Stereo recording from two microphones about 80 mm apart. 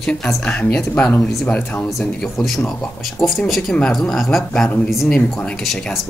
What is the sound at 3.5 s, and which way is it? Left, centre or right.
Speech, centre.